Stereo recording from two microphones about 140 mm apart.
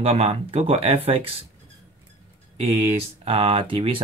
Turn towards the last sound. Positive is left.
turn(degrees=-40)  # may be behind; listen again after turning